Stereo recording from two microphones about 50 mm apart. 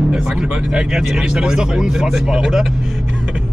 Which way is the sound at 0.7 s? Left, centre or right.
Centre.